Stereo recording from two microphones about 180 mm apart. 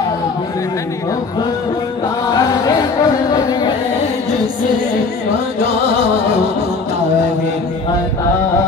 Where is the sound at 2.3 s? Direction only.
20° left (ahead or behind).